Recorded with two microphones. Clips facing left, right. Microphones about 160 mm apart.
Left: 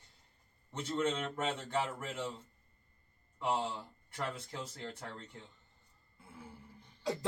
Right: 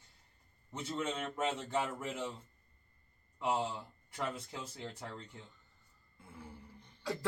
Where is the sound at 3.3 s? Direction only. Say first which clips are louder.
Even; 5° right (ahead or behind).